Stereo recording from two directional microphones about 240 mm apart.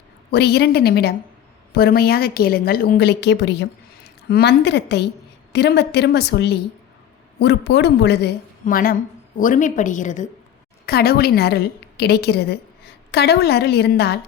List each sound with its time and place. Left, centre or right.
0.3 s a woman's voice: left